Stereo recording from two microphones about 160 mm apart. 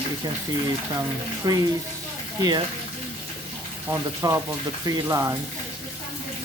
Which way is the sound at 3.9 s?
20° right (ahead or behind).